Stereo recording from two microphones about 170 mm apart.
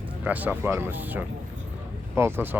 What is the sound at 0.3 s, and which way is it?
Speech, 10° right (ahead or behind).